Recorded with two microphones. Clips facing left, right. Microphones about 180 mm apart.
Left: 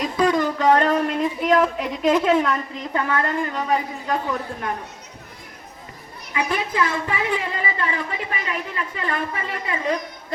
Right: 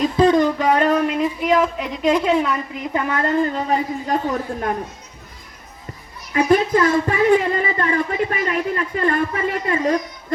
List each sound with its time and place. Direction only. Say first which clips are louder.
0.2 s speech: right 4 dB; 20° right (ahead or behind); by 2.8 s 5° right (ahead or behind)
2.9 s a woman's voice: right 1 dB; 20° right (ahead or behind)
3.3 s a man's voice: right 4 dB; 35° right (ahead or behind)
6.3 s speech: right 8 dB; 45° right (ahead or behind)